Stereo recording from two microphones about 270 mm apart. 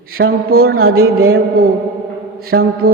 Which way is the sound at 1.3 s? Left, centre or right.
Right.